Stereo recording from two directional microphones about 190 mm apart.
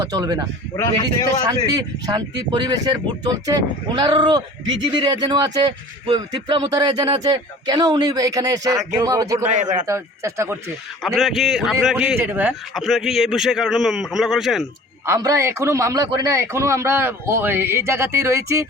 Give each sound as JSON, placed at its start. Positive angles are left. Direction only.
{"t": 0.0, "sound": "a man's voice", "side_deg": -20}
{"t": 9.5, "sound": "a man's voice", "side_deg": -40}
{"t": 9.8, "sound": "a man's voice", "side_deg": -15}
{"t": 11.0, "sound": "a man's voice", "side_deg": 0}
{"t": 15.0, "sound": "a man's voice", "side_deg": -15}